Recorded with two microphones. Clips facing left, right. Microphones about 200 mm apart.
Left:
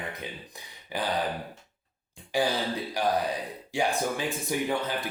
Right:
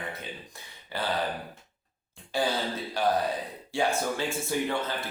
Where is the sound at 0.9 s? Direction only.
15° left (ahead or behind).